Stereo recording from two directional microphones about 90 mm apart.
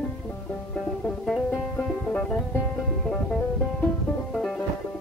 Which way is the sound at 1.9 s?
5° left (ahead or behind).